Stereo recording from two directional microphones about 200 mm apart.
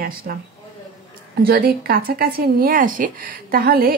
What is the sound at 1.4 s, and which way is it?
A woman's voice, 50° right (ahead or behind).